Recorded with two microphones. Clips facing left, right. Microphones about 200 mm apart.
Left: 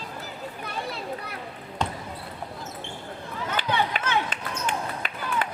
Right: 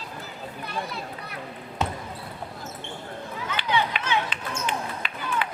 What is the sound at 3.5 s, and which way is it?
Run, 50° left (ahead or behind).